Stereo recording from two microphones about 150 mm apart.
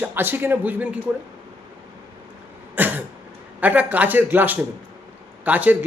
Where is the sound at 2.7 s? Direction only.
10° right (ahead or behind).